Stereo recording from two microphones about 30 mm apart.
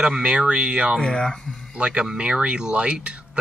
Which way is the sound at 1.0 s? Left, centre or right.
Left.